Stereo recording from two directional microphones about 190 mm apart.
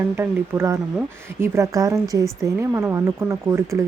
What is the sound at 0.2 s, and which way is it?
Speech, 15° right (ahead or behind).